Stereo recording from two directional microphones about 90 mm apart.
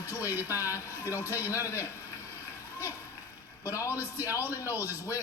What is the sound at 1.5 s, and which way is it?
Speech, 35° left (ahead or behind).